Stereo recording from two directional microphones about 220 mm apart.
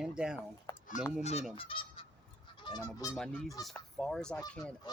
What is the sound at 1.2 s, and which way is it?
Speech, 30° left (ahead or behind).